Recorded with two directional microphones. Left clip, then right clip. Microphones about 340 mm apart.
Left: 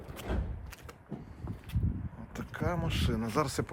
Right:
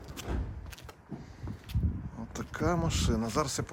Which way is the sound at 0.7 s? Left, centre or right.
Centre.